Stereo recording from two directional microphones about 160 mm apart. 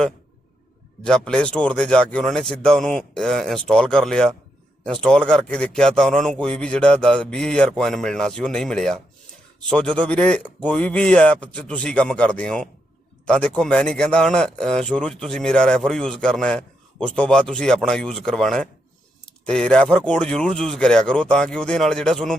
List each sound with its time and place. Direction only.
1.0 s a man's voice: 5° left (ahead or behind)